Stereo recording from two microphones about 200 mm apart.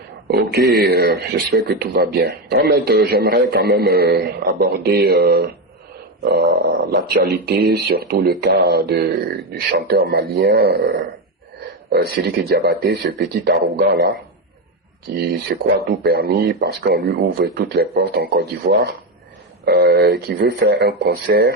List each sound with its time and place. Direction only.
0.3 s speech: 50° right (ahead or behind)
15.5 s speech: 55° right (ahead or behind)